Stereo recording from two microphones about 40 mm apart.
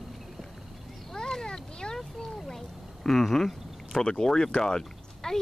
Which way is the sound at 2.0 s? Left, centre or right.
Centre.